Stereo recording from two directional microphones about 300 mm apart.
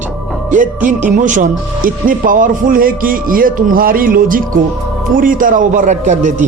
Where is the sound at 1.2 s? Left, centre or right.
Right.